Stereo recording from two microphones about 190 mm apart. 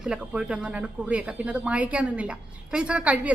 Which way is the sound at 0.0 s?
5° right (ahead or behind).